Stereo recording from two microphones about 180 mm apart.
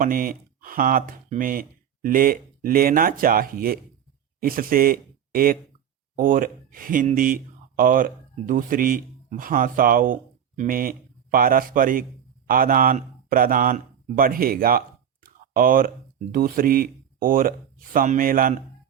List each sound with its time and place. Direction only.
0.0 s a man's voice: 50° right (ahead or behind)